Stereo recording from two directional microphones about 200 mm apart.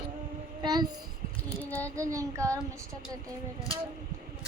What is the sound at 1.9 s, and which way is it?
Child singing, 15° right (ahead or behind).